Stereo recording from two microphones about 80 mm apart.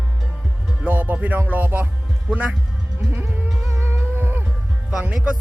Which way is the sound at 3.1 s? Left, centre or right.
Right.